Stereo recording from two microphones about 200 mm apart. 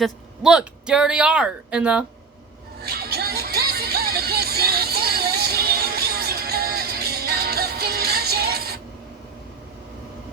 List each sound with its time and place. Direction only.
0.0 s speech: 5° right (ahead or behind)
2.8 s music: 50° right (ahead or behind)